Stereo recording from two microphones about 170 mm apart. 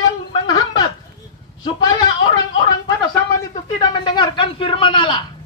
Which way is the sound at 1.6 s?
25° left (ahead or behind).